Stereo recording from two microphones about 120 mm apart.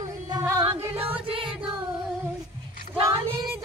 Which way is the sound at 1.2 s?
50° right (ahead or behind).